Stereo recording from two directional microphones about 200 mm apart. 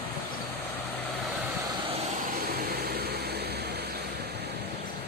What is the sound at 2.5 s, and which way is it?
Vehicle, 50° right (ahead or behind).